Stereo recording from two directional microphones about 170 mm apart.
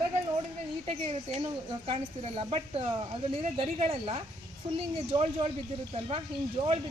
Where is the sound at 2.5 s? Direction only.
30° right (ahead or behind).